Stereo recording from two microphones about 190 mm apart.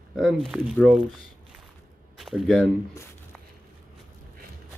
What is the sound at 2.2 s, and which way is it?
Speech, centre (ahead or behind).